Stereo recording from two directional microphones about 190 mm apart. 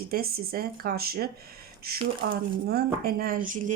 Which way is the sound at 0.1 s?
55° right (ahead or behind).